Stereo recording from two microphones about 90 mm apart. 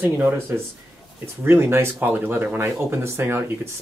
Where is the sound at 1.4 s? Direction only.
25° right (ahead or behind).